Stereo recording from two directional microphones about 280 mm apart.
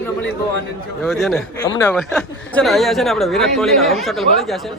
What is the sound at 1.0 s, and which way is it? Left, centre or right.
Speech, centre.